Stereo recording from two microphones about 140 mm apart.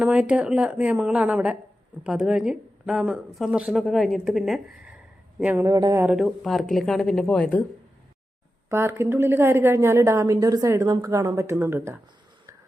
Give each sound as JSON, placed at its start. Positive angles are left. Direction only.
{"t": 0.0, "sound": "a woman's voice", "side_deg": -10}
{"t": 5.6, "sound": "a woman's voice", "side_deg": -25}
{"t": 6.0, "sound": "a woman's voice", "side_deg": -5}
{"t": 8.7, "sound": "a woman's voice", "side_deg": -15}